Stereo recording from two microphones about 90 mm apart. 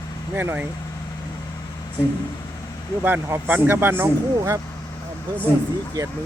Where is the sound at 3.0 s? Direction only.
25° right (ahead or behind).